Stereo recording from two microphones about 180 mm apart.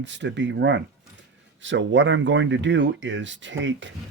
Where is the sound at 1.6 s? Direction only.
90° right.